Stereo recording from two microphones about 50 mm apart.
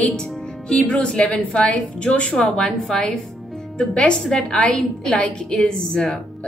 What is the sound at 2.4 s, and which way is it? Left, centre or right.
A woman's voice, centre.